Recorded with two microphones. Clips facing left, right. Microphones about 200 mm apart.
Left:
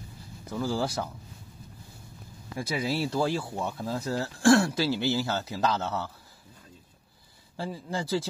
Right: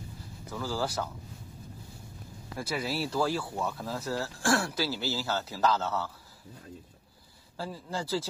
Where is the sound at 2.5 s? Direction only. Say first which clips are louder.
Left 3 dB; 20° left (ahead or behind).